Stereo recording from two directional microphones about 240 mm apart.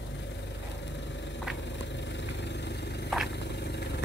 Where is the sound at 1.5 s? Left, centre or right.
Left.